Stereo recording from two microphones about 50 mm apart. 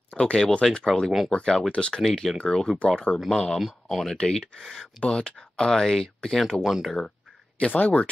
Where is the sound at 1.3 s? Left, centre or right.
Centre.